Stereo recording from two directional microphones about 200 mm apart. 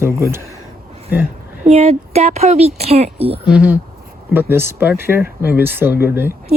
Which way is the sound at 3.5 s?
5° right (ahead or behind).